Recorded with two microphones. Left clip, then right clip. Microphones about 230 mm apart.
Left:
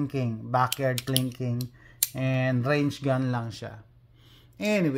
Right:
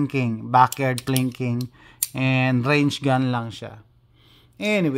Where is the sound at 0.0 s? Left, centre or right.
Right.